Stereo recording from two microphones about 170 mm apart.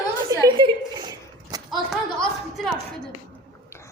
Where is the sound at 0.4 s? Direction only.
25° right (ahead or behind).